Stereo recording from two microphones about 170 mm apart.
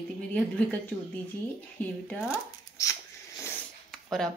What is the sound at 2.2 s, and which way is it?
Speech, 20° left (ahead or behind).